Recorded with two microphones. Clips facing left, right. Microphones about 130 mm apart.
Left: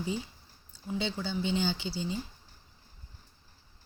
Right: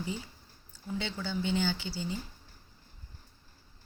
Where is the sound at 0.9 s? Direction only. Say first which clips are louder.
Left 2 dB; 15° left (ahead or behind).